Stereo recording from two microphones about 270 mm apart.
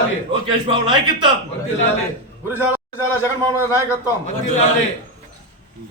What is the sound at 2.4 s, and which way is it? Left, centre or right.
Speech, centre.